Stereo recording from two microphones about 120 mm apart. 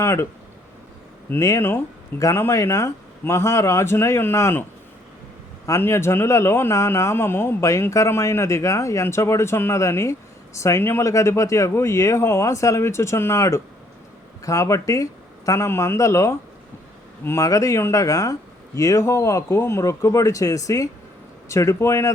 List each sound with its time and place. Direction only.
0.0 s a man's voice: 20° left (ahead or behind)
1.3 s a man's voice: 25° left (ahead or behind)
5.6 s a man's voice: 25° left (ahead or behind)